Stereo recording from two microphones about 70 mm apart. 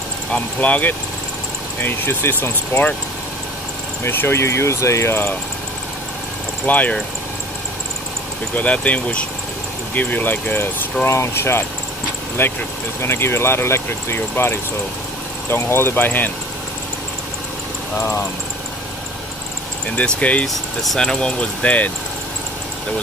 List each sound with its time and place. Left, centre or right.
0.3 s speech: left
4.0 s speech: left
6.6 s speech: left
8.5 s speech: centre
11.1 s speech: left
20.0 s speech: centre
20.4 s speech: centre